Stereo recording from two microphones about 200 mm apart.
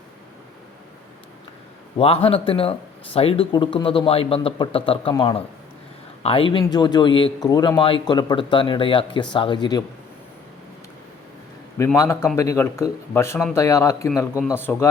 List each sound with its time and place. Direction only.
2.0 s speech: 30° left (ahead or behind)
11.9 s speech: 15° left (ahead or behind)